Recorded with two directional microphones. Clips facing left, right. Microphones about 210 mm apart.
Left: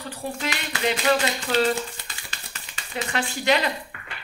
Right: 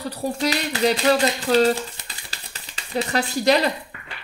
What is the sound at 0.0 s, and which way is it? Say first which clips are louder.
Speech: right 6 dB; 40° right (ahead or behind).